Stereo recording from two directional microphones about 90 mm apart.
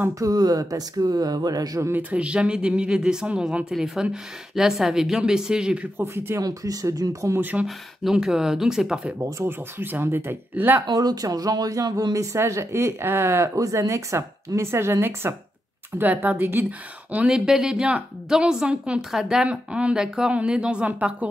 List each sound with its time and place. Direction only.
0.2 s speech: 45° right (ahead or behind)
1.9 s a woman's voice: 15° right (ahead or behind)
5.9 s speech: 30° right (ahead or behind)
7.6 s speech: 5° right (ahead or behind)
9.2 s speech: 25° right (ahead or behind)
10.9 s speech: 45° right (ahead or behind); by 16.6 s 20° right (ahead or behind)
17.1 s a woman's voice: 10° right (ahead or behind)